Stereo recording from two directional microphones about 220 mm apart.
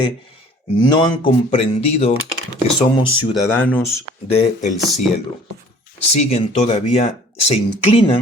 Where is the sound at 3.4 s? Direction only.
10° left (ahead or behind).